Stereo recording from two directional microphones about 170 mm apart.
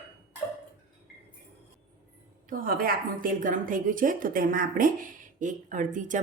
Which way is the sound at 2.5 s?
55° right (ahead or behind).